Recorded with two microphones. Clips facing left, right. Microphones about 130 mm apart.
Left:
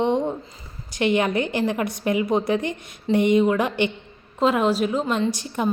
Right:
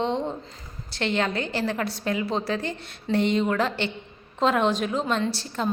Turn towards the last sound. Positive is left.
turn(degrees=15)  # may be behind; listen again after turning